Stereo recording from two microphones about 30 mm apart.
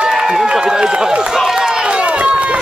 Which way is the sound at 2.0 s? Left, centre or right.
Right.